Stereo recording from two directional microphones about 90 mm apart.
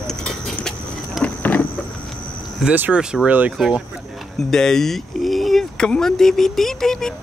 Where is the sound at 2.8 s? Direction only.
15° right (ahead or behind).